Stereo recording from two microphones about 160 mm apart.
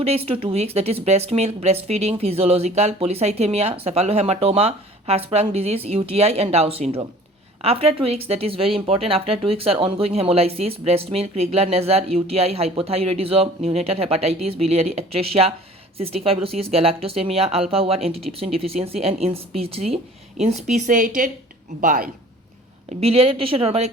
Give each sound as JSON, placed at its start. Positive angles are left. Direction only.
{"t": 0.0, "sound": "speech", "side_deg": -35}
{"t": 23.0, "sound": "speech", "side_deg": -40}